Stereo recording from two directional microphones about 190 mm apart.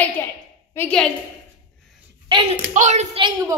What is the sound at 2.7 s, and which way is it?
Speech, 40° right (ahead or behind).